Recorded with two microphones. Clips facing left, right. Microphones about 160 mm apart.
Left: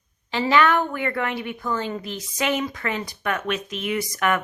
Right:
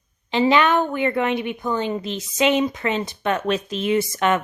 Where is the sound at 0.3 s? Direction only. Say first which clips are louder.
Right 2 dB; 20° right (ahead or behind).